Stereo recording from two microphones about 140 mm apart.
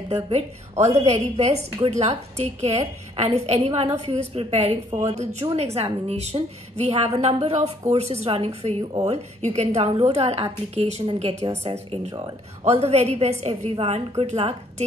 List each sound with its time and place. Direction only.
0.1 s speech: 50° right (ahead or behind)
12.6 s speech: 50° right (ahead or behind)